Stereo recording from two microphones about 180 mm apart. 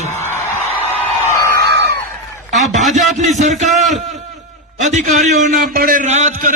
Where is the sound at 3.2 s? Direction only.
40° right (ahead or behind).